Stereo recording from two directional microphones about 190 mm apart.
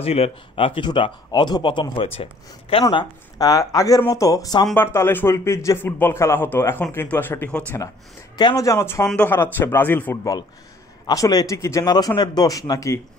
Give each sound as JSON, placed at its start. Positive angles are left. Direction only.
{"t": 0.0, "sound": "a man's voice", "side_deg": 30}
{"t": 8.4, "sound": "a man's voice", "side_deg": 20}